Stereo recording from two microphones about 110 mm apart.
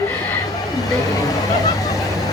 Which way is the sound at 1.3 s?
35° left (ahead or behind).